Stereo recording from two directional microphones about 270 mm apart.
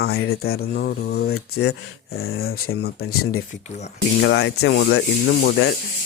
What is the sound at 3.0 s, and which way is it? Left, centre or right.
Speech, left.